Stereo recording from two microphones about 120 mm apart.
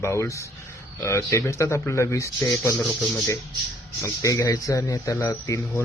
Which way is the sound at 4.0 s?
25° left (ahead or behind).